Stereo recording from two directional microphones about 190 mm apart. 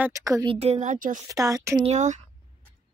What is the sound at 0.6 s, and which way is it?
Speech, 35° right (ahead or behind).